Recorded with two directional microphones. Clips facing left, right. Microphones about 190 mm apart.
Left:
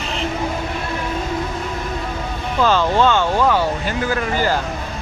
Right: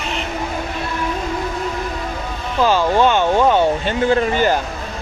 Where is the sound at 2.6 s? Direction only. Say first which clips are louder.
Right 1 dB; 10° right (ahead or behind).